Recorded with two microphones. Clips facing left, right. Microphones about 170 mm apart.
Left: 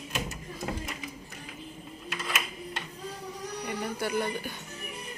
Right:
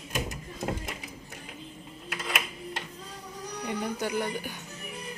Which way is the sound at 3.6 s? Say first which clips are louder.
Right 2 dB; 15° right (ahead or behind).